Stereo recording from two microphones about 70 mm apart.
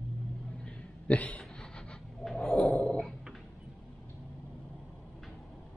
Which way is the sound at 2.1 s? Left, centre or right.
Centre.